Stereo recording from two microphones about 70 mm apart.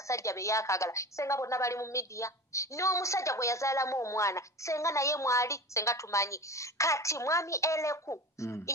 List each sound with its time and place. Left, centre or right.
0.1 s a woman's voice: left